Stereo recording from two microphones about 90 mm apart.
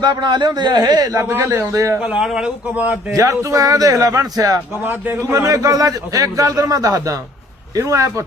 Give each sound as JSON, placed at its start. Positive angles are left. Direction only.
{"t": 0.0, "sound": "speech", "side_deg": -55}
{"t": 1.2, "sound": "a man's voice", "side_deg": -30}
{"t": 2.0, "sound": "speech", "side_deg": -10}
{"t": 3.1, "sound": "a man's voice", "side_deg": -35}
{"t": 4.8, "sound": "a man's voice", "side_deg": -20}
{"t": 5.5, "sound": "a man's voice", "side_deg": -40}